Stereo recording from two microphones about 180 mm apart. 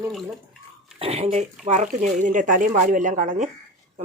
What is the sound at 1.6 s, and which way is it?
Speech, 40° right (ahead or behind).